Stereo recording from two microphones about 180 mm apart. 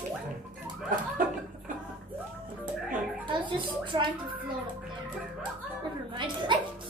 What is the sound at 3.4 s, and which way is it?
Speech, 25° right (ahead or behind).